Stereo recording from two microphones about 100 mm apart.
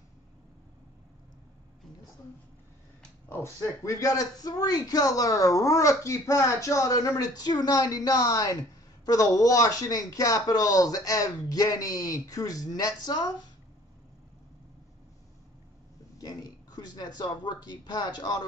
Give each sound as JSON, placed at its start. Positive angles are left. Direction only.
{"t": 3.3, "sound": "a man's voice", "side_deg": 25}
{"t": 16.2, "sound": "speech", "side_deg": 40}